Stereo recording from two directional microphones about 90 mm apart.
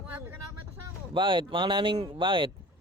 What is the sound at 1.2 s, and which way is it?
Speech, 70° right (ahead or behind).